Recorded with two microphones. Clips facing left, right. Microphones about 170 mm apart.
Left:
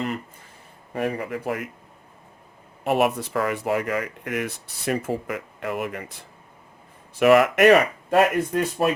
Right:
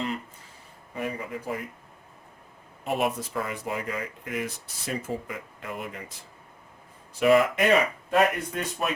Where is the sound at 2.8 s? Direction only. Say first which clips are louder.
Left 6 dB; 75° left (ahead or behind).